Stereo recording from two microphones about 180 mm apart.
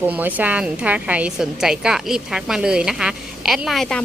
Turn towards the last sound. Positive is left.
turn(degrees=0)  # may be behind; listen again after turning